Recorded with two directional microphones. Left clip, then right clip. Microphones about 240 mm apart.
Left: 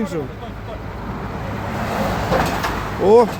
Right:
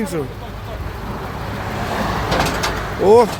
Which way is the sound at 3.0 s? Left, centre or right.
Centre.